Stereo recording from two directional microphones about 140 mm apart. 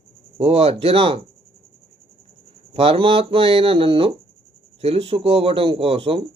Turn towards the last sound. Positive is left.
turn(degrees=-40)  # may be behind; listen again after turning